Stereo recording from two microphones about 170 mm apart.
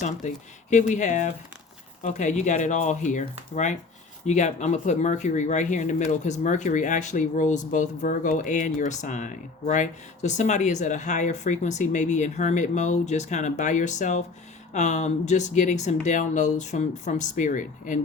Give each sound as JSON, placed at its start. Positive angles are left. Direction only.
{"t": 0.0, "sound": "speech", "side_deg": 45}